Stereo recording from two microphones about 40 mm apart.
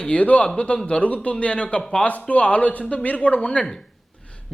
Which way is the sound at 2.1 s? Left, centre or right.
Left.